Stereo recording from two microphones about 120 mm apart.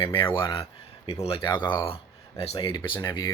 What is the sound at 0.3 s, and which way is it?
Speech, 40° left (ahead or behind).